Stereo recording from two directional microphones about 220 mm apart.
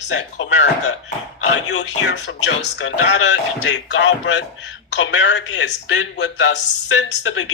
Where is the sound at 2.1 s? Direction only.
50° left (ahead or behind).